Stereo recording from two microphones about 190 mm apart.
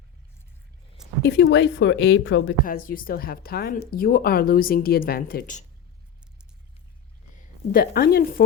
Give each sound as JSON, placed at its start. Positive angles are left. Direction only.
{"t": 1.2, "sound": "speech", "side_deg": 65}
{"t": 2.9, "sound": "speech", "side_deg": 50}
{"t": 7.7, "sound": "a woman's voice", "side_deg": 55}